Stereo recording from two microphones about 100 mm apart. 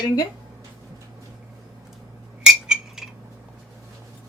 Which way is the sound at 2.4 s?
5° right (ahead or behind).